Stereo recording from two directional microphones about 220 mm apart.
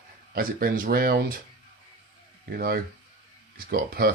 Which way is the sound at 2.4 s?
45° right (ahead or behind).